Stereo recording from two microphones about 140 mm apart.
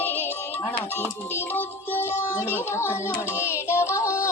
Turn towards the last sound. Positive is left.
turn(degrees=20)  # may be behind; listen again after turning